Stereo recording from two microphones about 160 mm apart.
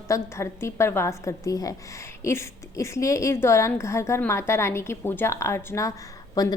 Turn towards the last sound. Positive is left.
turn(degrees=25)  # may be behind; listen again after turning